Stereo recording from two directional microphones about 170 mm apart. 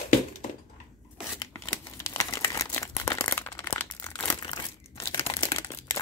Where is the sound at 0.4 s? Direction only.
50° left (ahead or behind).